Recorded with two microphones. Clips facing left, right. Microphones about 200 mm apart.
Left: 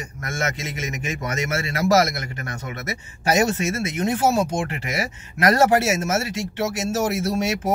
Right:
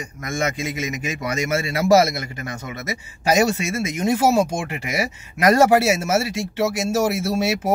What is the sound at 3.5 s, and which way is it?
Speech, 15° right (ahead or behind).